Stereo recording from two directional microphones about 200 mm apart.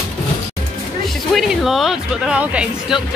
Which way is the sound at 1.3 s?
Centre (ahead or behind).